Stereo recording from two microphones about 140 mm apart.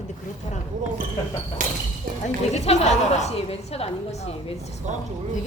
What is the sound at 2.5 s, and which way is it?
A woman's voice, 50° left (ahead or behind).